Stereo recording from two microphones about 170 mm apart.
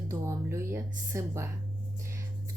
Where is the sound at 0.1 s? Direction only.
15° right (ahead or behind).